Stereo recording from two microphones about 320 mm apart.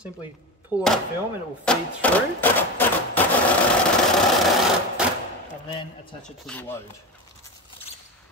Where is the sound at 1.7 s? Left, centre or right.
Centre.